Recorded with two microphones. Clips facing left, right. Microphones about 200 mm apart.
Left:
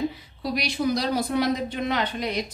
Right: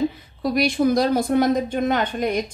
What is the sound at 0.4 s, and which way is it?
A woman's voice, 50° right (ahead or behind).